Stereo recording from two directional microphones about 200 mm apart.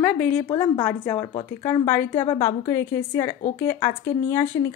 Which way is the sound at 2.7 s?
10° left (ahead or behind).